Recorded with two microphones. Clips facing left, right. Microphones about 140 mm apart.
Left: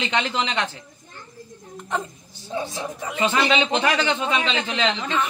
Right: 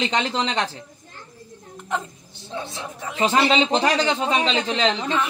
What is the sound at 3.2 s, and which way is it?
Speech, 30° right (ahead or behind).